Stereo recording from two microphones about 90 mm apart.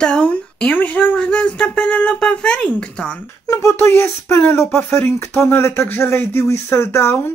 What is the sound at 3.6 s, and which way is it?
Speech, 30° left (ahead or behind).